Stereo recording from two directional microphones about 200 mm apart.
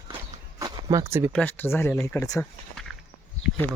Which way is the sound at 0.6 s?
15° right (ahead or behind).